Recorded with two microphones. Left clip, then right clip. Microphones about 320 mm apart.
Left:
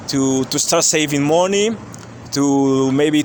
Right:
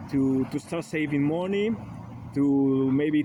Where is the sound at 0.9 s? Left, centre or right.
Centre.